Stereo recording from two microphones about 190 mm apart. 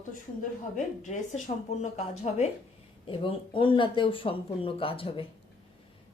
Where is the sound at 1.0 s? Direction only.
40° left (ahead or behind).